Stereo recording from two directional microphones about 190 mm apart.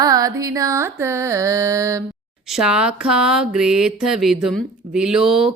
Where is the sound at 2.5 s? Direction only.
5° right (ahead or behind).